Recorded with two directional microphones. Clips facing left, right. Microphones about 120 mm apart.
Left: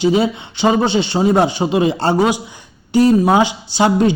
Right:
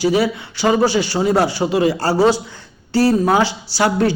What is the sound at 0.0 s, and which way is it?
A man's voice, 20° left (ahead or behind).